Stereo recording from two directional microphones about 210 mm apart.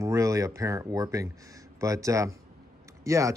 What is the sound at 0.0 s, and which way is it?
Speech, 15° right (ahead or behind).